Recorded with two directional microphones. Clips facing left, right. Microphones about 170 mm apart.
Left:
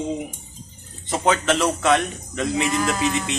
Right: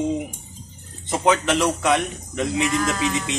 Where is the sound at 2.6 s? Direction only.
15° left (ahead or behind).